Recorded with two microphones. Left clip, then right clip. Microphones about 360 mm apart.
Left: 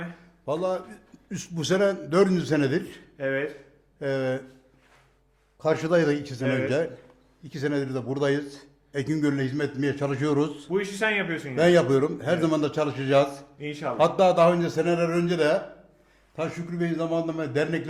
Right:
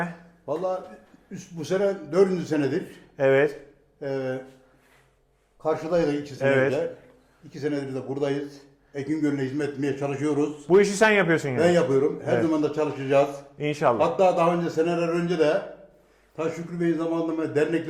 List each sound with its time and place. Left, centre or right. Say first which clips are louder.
0.4 s a man's voice: even; left
3.2 s speech: right 8 dB; right
4.0 s a man's voice: left 2 dB; left
5.6 s a man's voice: left 1 dB; left
7.5 s a man's voice: left 1 dB; left
10.7 s speech: right 12 dB; right
11.5 s a man's voice: left 3 dB; left
13.6 s speech: right 9 dB; right
14.0 s a man's voice: left 5 dB; left
16.3 s a man's voice: right 2 dB; left